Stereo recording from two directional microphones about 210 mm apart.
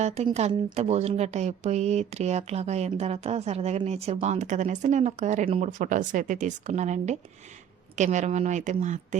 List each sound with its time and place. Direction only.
0.0 s speech: 30° right (ahead or behind)